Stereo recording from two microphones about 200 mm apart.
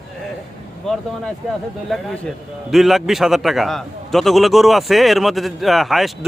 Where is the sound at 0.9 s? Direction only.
5° left (ahead or behind).